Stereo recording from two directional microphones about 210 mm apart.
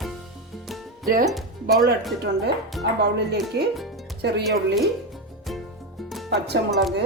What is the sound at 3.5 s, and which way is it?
Speech, 50° right (ahead or behind).